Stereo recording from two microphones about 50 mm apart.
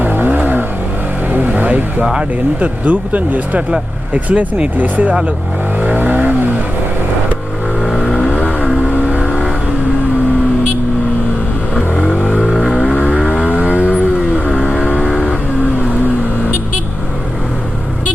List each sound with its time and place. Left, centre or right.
0.0 s vehicle: right
2.6 s speech: right
5.8 s vehicle: right
7.8 s vehicle: centre
8.3 s vehicle: right
9.2 s vehicle: centre
12.0 s vehicle: left
12.5 s vehicle: centre
13.1 s vehicle: centre
14.0 s a sound: right
14.8 s vehicle: centre